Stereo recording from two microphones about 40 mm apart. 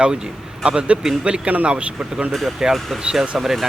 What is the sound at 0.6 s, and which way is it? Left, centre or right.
Speech, centre.